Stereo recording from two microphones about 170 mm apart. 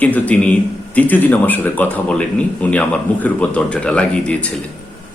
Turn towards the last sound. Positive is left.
turn(degrees=5)  # may be behind; listen again after turning